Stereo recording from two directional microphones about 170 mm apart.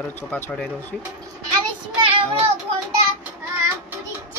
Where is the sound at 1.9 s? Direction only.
30° right (ahead or behind).